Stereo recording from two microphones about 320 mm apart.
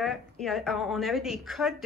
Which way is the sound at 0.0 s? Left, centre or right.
Centre.